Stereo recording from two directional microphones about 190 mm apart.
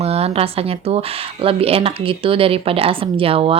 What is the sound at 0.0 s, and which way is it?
Speech, 35° right (ahead or behind).